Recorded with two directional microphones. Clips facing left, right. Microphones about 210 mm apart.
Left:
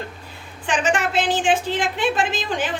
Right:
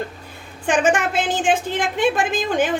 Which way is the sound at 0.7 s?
50° right (ahead or behind).